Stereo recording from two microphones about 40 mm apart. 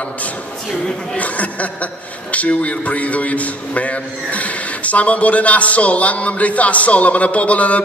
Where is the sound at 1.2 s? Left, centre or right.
Left.